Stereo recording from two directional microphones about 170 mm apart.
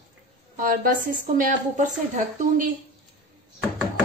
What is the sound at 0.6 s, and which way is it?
A woman's voice, 55° right (ahead or behind).